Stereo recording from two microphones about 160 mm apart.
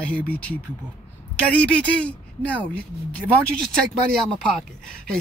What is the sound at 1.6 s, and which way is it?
Speech, 10° left (ahead or behind).